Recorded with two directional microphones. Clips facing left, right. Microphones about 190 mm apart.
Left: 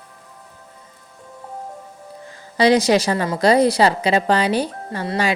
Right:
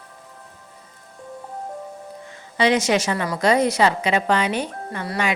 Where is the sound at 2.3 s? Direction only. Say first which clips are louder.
Left 4 dB; 35° left (ahead or behind).